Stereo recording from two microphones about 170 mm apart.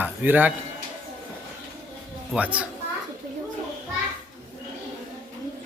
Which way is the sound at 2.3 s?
10° right (ahead or behind).